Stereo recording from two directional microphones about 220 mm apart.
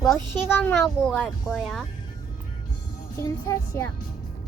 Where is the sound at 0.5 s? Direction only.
5° left (ahead or behind).